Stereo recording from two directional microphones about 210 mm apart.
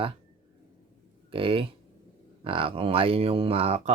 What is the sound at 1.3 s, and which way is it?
Speech, 25° right (ahead or behind).